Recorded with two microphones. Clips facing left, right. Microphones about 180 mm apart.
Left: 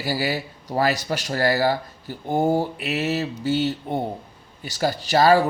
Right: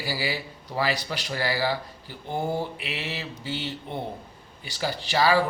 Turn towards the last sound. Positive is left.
turn(degrees=45)  # may be behind; listen again after turning